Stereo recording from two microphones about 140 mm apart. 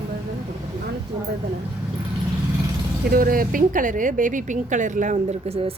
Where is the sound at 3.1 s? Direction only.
90° right.